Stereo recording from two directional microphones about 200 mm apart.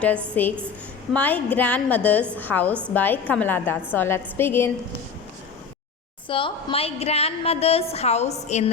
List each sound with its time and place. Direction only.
0.4 s a woman's voice: 10° left (ahead or behind)
6.2 s a woman's voice: 25° left (ahead or behind)